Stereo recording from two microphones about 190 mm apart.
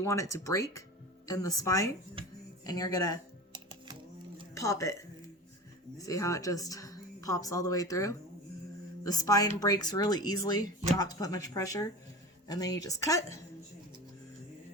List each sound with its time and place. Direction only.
0.0 s a woman's voice: 15° left (ahead or behind)
2.2 s a sound: 30° right (ahead or behind)
2.6 s speech: 20° left (ahead or behind)
4.5 s a woman's voice: 15° left (ahead or behind)